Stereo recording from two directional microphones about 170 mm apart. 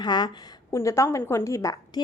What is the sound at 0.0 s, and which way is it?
A woman's voice, 25° left (ahead or behind).